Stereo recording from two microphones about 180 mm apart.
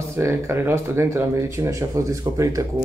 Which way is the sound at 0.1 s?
15° right (ahead or behind).